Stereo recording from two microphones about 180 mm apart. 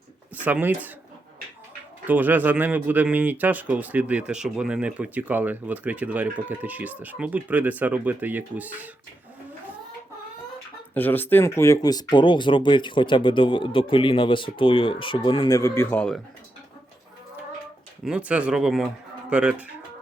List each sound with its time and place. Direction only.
0.3 s speech: 10° right (ahead or behind)
2.0 s speech: 10° right (ahead or behind)
10.9 s speech: 10° left (ahead or behind)
18.0 s speech: 5° right (ahead or behind)